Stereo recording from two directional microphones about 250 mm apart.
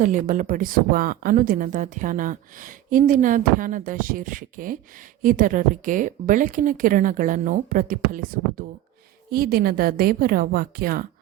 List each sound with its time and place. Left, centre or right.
0.0 s a woman's voice: right